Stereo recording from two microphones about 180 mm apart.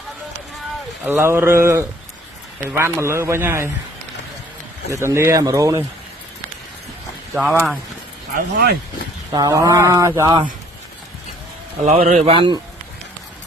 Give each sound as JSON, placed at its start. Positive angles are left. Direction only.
{"t": 1.0, "sound": "speech", "side_deg": -10}
{"t": 4.9, "sound": "speech", "side_deg": -15}
{"t": 7.3, "sound": "speech", "side_deg": -5}
{"t": 8.4, "sound": "speech", "side_deg": -65}
{"t": 9.3, "sound": "a sound", "side_deg": -20}
{"t": 11.9, "sound": "speech", "side_deg": -40}